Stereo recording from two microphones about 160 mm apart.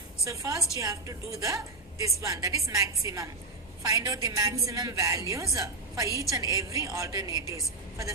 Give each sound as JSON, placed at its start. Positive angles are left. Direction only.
{"t": 0.3, "sound": "a woman's voice", "side_deg": -20}